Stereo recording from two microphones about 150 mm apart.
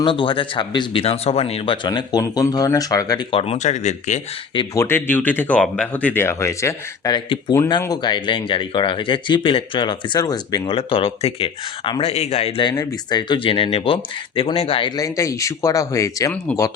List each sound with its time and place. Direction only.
0.0 s speech: 35° left (ahead or behind)
3.3 s speech: 45° left (ahead or behind)
4.5 s speech: 20° left (ahead or behind)
10.8 s speech: 40° left (ahead or behind)
12.7 s speech: 25° left (ahead or behind)